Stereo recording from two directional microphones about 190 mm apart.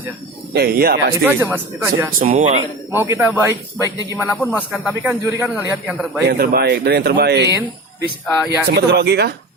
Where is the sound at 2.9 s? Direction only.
10° right (ahead or behind).